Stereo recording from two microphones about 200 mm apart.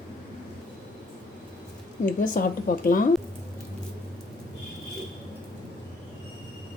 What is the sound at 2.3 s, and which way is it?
Speech, 45° left (ahead or behind).